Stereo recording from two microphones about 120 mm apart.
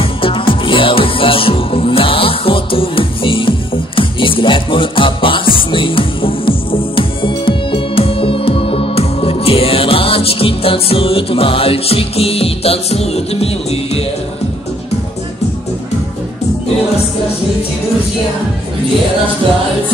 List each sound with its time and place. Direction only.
0.0 s music: 45° left (ahead or behind)